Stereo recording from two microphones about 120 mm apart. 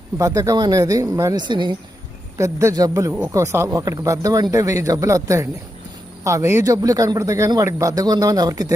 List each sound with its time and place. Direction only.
0.2 s a man's voice: 30° right (ahead or behind)
2.4 s a man's voice: 25° right (ahead or behind)